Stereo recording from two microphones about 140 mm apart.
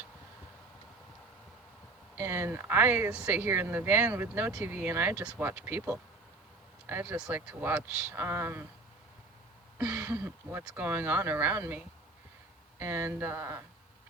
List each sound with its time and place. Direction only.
2.1 s speech: 15° right (ahead or behind)
9.7 s speech: 10° right (ahead or behind)
12.8 s speech: 15° right (ahead or behind)